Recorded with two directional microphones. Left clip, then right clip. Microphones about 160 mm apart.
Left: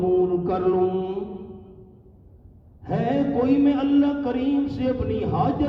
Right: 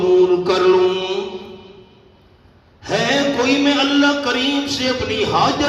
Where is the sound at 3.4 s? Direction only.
50° left (ahead or behind).